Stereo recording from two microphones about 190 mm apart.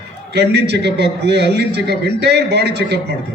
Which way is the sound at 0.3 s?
60° right (ahead or behind).